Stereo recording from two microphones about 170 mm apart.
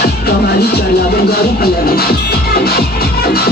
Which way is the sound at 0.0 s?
70° left (ahead or behind).